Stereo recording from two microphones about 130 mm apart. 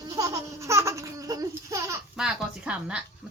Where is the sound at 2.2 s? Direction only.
5° right (ahead or behind).